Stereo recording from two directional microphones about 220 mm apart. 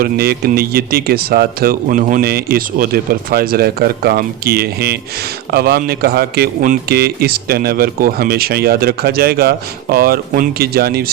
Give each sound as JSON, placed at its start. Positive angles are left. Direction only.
{"t": 0.0, "sound": "a man's voice", "side_deg": -45}